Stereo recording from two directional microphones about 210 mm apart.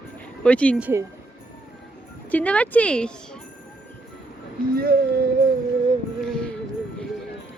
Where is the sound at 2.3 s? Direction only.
5° left (ahead or behind).